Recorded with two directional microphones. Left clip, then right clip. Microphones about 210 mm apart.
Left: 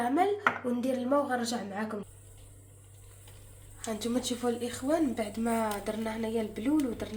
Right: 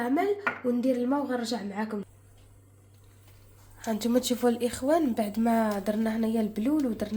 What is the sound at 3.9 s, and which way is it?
A woman's voice, 50° right (ahead or behind).